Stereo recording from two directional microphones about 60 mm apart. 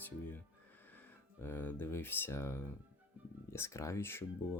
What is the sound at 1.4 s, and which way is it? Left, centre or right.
Speech, left.